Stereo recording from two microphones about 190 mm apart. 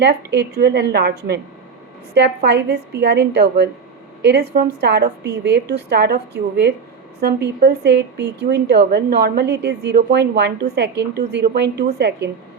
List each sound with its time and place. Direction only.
0.0 s a woman's voice: 65° right (ahead or behind)